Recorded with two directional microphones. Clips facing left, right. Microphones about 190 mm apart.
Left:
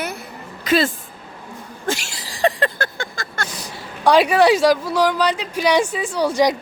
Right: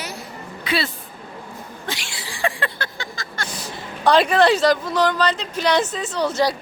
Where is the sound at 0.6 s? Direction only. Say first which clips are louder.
Left 6 dB; 45° left (ahead or behind).